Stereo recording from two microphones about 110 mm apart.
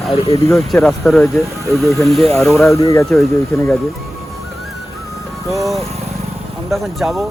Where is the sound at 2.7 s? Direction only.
30° left (ahead or behind).